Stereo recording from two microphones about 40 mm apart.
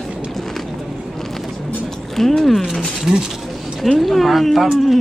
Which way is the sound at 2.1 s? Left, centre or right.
Centre.